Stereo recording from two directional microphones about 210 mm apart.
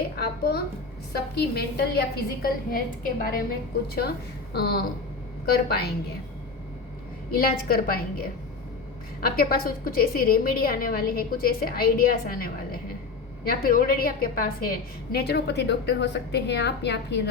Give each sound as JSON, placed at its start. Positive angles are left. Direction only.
{"t": 0.2, "sound": "a sound", "side_deg": 50}
{"t": 1.1, "sound": "a woman's voice", "side_deg": 50}
{"t": 4.5, "sound": "a woman's voice", "side_deg": 50}
{"t": 7.3, "sound": "a woman's voice", "side_deg": 45}
{"t": 9.2, "sound": "a woman's voice", "side_deg": 45}